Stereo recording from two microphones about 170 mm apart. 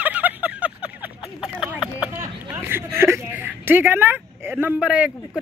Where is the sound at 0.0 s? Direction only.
10° right (ahead or behind).